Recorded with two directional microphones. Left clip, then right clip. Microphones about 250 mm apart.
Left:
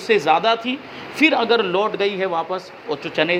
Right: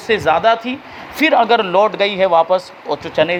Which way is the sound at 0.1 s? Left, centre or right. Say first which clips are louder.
Right 3 dB; right.